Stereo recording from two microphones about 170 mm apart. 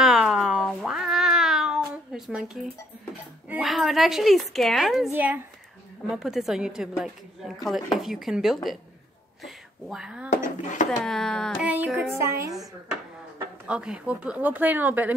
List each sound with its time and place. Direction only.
0.0 s cat: 5° right (ahead or behind)
3.4 s speech: 5° right (ahead or behind)
10.3 s speech: 50° left (ahead or behind)
11.1 s speech: 5° left (ahead or behind)
11.6 s speech: 10° right (ahead or behind)
13.7 s speech: 5° right (ahead or behind)